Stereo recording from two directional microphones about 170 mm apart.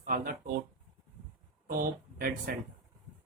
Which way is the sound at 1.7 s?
55° right (ahead or behind).